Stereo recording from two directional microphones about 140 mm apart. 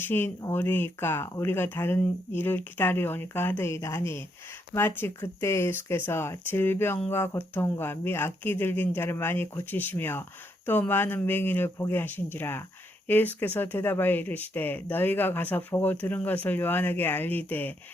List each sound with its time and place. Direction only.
0.0 s speech: 15° left (ahead or behind)